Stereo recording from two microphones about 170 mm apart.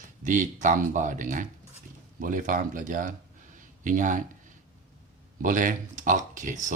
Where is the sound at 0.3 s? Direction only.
50° right (ahead or behind).